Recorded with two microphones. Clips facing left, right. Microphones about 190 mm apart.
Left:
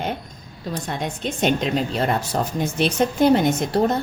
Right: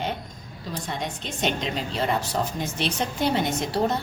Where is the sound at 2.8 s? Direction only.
50° left (ahead or behind).